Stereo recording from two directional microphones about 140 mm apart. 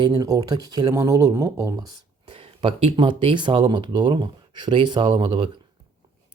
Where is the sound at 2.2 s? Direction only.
35° right (ahead or behind).